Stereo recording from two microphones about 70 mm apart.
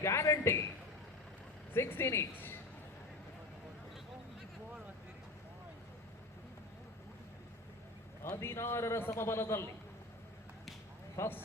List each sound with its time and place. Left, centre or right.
0.0 s a man's voice: left
1.7 s speech: left
8.2 s a man's voice: left
11.2 s a man's voice: left